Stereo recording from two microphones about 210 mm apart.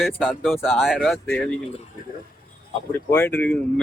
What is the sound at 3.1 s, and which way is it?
Speech, 10° left (ahead or behind).